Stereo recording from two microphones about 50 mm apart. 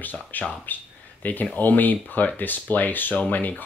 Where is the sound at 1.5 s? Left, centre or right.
Left.